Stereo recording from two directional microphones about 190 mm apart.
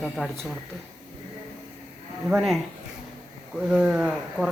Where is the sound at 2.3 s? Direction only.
Centre (ahead or behind).